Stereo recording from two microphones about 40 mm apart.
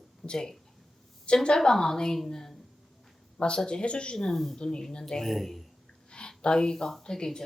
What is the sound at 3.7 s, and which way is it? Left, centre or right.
Speech, left.